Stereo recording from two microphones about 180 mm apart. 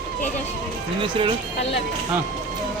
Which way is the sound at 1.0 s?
25° right (ahead or behind).